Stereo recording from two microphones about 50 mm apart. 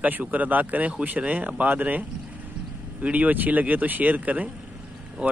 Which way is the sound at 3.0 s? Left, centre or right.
Right.